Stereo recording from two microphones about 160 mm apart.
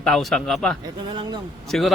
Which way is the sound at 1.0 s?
30° right (ahead or behind).